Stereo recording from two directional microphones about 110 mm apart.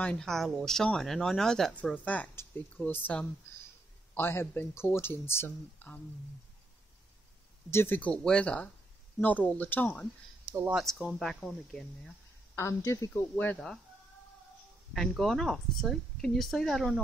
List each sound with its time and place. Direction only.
0.0 s speech: 5° left (ahead or behind)
7.7 s speech: 20° left (ahead or behind)
10.7 s speech: 5° right (ahead or behind)
12.5 s speech: 30° left (ahead or behind)
15.0 s speech: centre (ahead or behind)